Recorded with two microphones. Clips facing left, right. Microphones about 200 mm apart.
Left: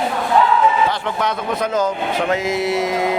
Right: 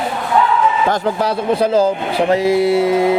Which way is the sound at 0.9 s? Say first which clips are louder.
Right 4 dB; 35° right (ahead or behind).